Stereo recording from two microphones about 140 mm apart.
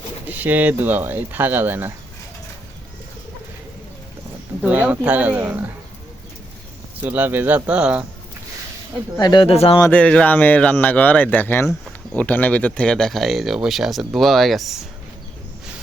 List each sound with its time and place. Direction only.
0.3 s speech: 10° right (ahead or behind)
4.6 s speech: 10° right (ahead or behind)
7.0 s speech: 15° right (ahead or behind)
9.1 s speech: 30° left (ahead or behind)
9.5 s speech: 45° left (ahead or behind)
9.9 s speech: 10° left (ahead or behind)